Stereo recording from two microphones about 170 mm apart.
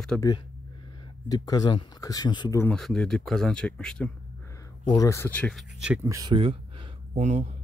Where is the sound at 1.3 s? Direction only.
20° left (ahead or behind).